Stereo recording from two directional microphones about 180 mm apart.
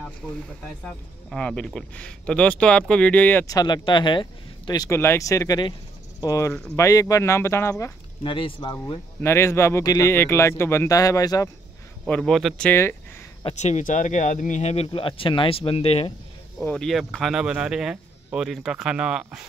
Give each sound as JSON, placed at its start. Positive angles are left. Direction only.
{"t": 0.8, "sound": "speech", "side_deg": 5}
{"t": 6.5, "sound": "speech", "side_deg": 5}
{"t": 6.8, "sound": "speech", "side_deg": 20}
{"t": 8.2, "sound": "speech", "side_deg": 30}
{"t": 9.2, "sound": "speech", "side_deg": 15}
{"t": 12.0, "sound": "speech", "side_deg": 0}
{"t": 13.4, "sound": "speech", "side_deg": 35}
{"t": 16.6, "sound": "speech", "side_deg": 5}